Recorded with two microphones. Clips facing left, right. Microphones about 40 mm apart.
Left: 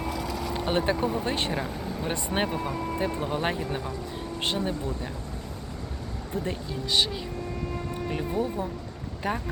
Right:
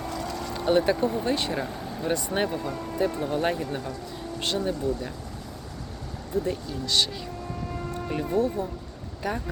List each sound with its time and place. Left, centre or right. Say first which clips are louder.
0.1 s vehicle: left 1 dB; centre
0.5 s vehicle: right 6 dB; left
0.8 s speech: right 2 dB; centre
1.3 s speech: right 2 dB; left
1.5 s speech: even; centre
2.1 s speech: even; centre
4.4 s speech: right 1 dB; left
6.3 s speech: right 4 dB; left
6.7 s speech: even; centre
9.2 s speech: even; left